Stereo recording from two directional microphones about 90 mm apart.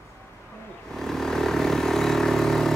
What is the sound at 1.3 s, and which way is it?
Vehicle, 5° left (ahead or behind).